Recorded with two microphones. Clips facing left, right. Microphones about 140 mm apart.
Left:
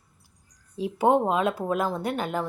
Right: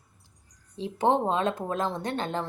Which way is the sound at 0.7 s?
10° left (ahead or behind).